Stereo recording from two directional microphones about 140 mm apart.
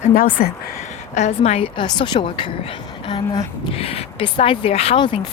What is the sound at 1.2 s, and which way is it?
Speech, 50° left (ahead or behind).